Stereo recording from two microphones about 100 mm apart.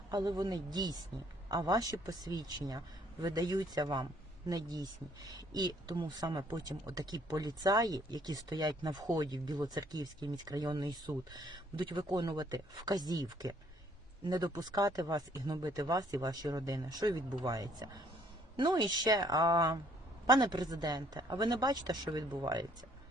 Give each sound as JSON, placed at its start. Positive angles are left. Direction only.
{"t": 0.1, "sound": "speech", "side_deg": -40}